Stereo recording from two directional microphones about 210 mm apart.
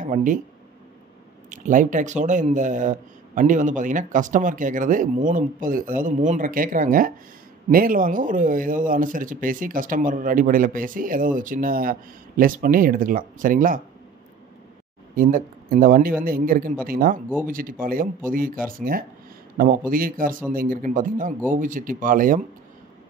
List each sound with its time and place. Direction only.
0.0 s speech: 40° right (ahead or behind)
1.5 s speech: 40° right (ahead or behind)
15.1 s speech: 40° right (ahead or behind)